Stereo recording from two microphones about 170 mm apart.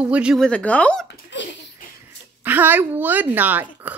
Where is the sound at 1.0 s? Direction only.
90° left.